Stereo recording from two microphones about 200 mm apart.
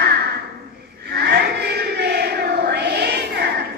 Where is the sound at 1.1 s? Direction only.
55° right (ahead or behind).